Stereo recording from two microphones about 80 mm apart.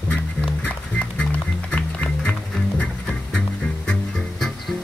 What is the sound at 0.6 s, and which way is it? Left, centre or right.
Music, centre.